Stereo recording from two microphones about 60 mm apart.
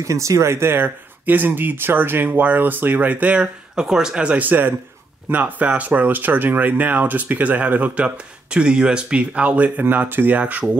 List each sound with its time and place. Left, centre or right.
0.0 s speech: right
3.8 s speech: centre
4.4 s speech: right